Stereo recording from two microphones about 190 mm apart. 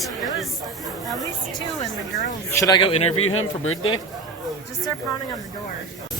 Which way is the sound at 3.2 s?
90° left.